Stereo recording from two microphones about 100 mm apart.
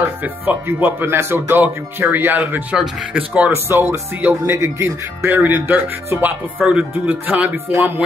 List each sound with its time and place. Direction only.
0.2 s speech: 20° right (ahead or behind)